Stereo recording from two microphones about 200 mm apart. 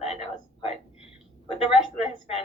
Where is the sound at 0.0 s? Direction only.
30° left (ahead or behind).